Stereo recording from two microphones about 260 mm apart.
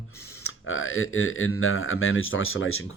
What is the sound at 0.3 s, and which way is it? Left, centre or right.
Speech, left.